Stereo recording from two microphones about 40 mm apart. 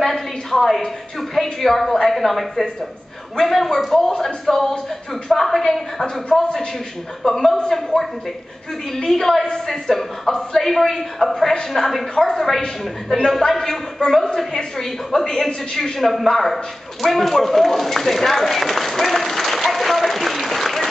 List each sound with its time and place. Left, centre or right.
0.0 s a sound: centre
1.3 s a woman's voice: centre
12.6 s a man's voice: centre
17.0 s run: centre